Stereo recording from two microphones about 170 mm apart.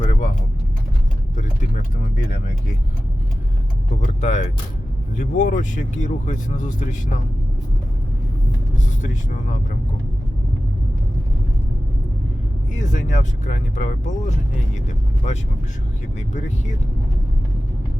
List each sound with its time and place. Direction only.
0.0 s vehicle: 45° left (ahead or behind)
4.0 s music: 45° left (ahead or behind)
5.2 s speech: 50° left (ahead or behind)
12.7 s speech: 45° left (ahead or behind)
16.1 s speech: 45° left (ahead or behind)